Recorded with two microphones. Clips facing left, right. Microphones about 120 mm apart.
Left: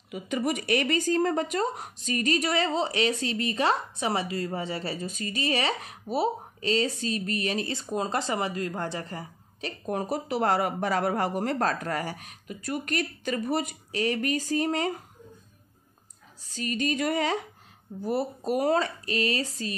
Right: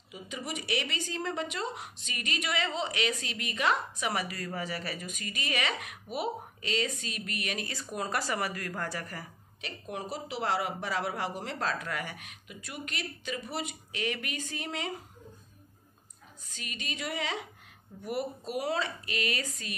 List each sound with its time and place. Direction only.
0.1 s speech: 55° left (ahead or behind); by 9.3 s 25° left (ahead or behind)
9.6 s speech: 40° left (ahead or behind)
16.4 s speech: 35° left (ahead or behind)
18.0 s speech: 30° left (ahead or behind)
18.5 s speech: 45° left (ahead or behind)